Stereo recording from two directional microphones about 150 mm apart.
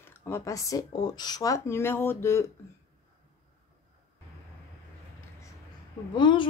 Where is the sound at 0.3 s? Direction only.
20° left (ahead or behind).